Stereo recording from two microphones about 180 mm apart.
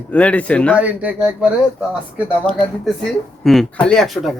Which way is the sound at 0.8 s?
10° right (ahead or behind).